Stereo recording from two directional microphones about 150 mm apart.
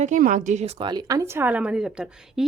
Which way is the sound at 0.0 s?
60° right (ahead or behind).